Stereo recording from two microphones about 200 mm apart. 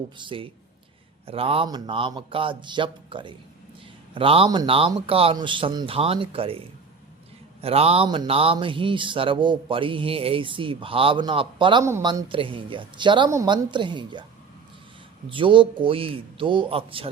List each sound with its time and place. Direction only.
0.2 s speech: 25° right (ahead or behind)
7.6 s speech: 30° right (ahead or behind); by 12.2 s 15° right (ahead or behind)
12.3 s speech: 25° right (ahead or behind)
15.3 s speech: 25° right (ahead or behind)